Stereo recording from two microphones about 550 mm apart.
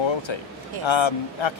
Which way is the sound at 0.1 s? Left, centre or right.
Left.